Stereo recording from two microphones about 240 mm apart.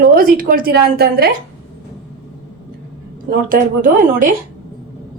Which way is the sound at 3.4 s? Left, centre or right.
Right.